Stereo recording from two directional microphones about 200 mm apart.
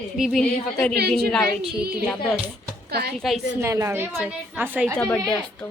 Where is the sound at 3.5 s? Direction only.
15° right (ahead or behind).